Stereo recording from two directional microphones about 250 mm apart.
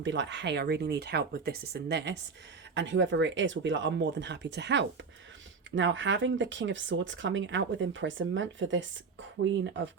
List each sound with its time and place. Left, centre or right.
0.0 s speech: right